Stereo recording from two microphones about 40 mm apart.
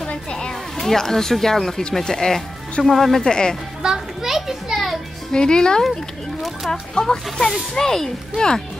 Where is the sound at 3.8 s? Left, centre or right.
Centre.